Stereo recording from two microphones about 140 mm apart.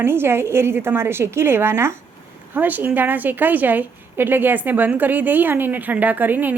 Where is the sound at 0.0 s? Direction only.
15° right (ahead or behind).